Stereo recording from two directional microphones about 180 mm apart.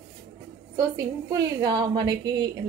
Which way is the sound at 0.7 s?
20° right (ahead or behind).